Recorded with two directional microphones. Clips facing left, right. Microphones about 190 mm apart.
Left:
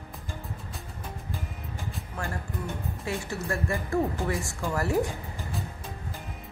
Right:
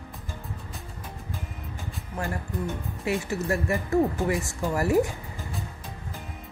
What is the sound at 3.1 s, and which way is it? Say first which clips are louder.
Speech: right 5 dB; 20° right (ahead or behind).